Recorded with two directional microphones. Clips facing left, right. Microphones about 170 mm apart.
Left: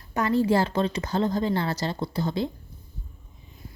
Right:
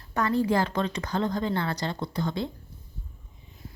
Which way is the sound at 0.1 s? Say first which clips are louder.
Left 2 dB; 20° left (ahead or behind).